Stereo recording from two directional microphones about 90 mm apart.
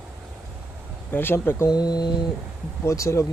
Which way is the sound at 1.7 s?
50° left (ahead or behind).